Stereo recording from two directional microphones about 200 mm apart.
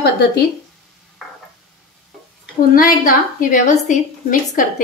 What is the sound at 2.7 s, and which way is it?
A woman's voice, 45° left (ahead or behind).